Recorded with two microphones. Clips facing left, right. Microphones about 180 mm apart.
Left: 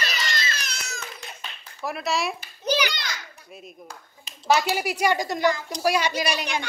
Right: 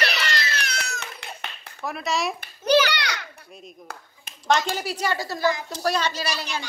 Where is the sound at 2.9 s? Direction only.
70° right (ahead or behind).